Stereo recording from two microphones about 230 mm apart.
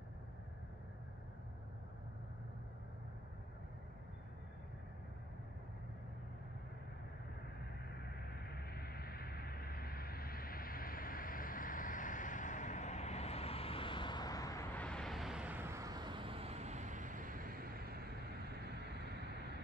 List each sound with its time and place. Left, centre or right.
8.5 s vehicle: left; by 19.3 s right